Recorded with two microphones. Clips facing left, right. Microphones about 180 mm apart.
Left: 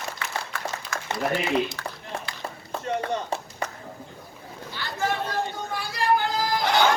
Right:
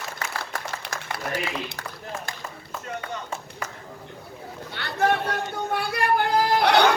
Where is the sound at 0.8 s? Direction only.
65° right (ahead or behind).